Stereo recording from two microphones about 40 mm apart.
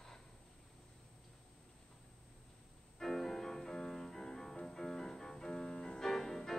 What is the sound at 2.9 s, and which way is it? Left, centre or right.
Music, centre.